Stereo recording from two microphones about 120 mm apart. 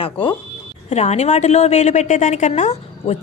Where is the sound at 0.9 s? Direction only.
65° left (ahead or behind).